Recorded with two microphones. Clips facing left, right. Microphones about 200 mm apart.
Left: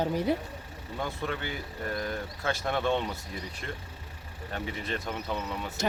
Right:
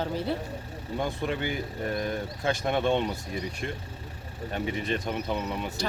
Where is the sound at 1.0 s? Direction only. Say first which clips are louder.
Right 4 dB; 20° right (ahead or behind).